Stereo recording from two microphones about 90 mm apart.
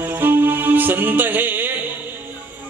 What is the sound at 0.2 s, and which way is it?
Music, 25° right (ahead or behind).